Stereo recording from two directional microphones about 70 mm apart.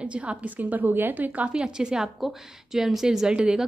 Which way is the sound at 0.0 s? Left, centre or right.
Centre.